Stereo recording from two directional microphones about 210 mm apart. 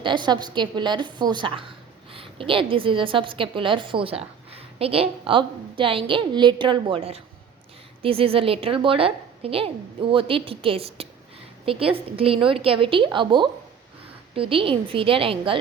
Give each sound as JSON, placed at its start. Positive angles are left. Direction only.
{"t": 0.0, "sound": "a woman's voice", "side_deg": -20}